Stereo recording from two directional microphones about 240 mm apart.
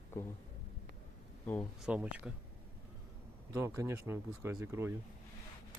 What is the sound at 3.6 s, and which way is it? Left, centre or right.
Speech, centre.